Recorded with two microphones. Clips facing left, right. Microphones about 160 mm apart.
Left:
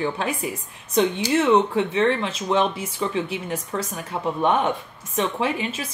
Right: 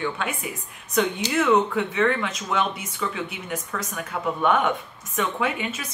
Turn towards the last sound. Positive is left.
turn(degrees=30)  # may be behind; listen again after turning